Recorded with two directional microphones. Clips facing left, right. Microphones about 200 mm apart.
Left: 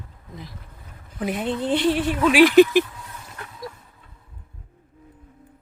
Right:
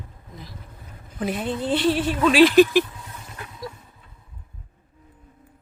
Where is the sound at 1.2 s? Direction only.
15° left (ahead or behind).